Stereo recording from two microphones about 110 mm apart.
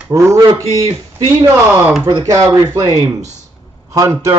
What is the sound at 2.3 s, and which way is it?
A man's voice, 25° right (ahead or behind).